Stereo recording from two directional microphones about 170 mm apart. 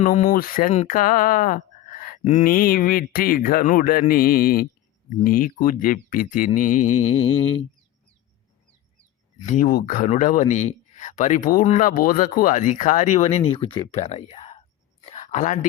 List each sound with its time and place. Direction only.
0.0 s speech: 50° left (ahead or behind); by 7.6 s 35° left (ahead or behind)
9.5 s speech: 50° left (ahead or behind)
15.0 s a sound: 40° left (ahead or behind)